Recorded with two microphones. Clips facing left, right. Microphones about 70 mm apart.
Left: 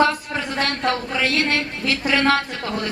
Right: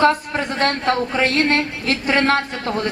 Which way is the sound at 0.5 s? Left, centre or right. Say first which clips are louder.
Right 4 dB; right.